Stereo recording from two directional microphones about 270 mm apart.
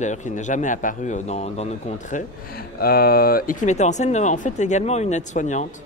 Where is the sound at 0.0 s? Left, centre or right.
Left.